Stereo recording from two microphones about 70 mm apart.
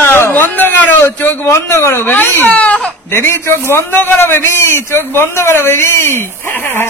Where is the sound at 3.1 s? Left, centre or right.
Left.